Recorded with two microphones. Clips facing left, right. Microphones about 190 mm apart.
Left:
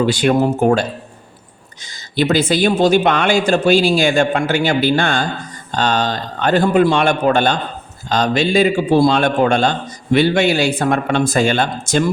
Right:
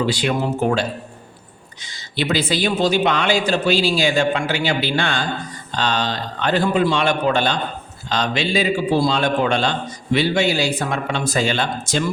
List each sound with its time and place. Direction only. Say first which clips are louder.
0.0 s a man's voice: left 6 dB; 50° left (ahead or behind)